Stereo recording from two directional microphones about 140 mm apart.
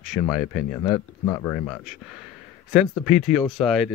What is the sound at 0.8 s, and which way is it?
Speech, 25° left (ahead or behind).